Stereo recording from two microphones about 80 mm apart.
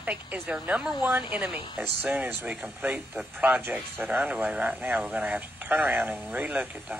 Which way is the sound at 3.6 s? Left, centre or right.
Right.